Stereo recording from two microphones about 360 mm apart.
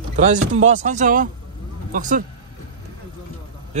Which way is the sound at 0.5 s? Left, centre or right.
Centre.